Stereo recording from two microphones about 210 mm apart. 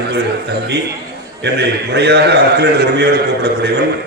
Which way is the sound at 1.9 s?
55° right (ahead or behind).